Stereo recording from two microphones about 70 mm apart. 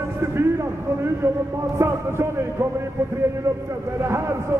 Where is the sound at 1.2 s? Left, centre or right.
Right.